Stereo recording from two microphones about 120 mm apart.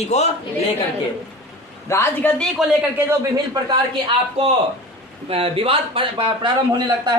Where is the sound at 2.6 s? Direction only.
Centre (ahead or behind).